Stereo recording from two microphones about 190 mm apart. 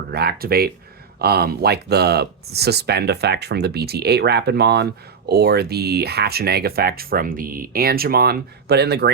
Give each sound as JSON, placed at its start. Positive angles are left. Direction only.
{"t": 0.1, "sound": "speech", "side_deg": -55}